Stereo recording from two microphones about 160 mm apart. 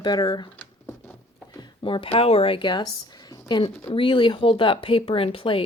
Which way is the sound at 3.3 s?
30° left (ahead or behind).